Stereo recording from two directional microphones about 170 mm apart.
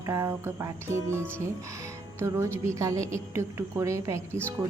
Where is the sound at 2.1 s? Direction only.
15° right (ahead or behind).